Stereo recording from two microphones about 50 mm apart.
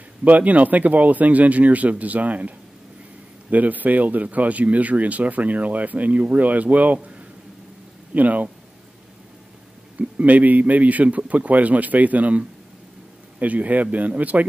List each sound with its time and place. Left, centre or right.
0.2 s speech: right
9.9 s speech: right